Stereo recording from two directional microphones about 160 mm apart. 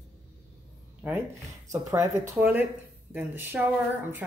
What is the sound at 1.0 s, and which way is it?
Speech, 15° right (ahead or behind).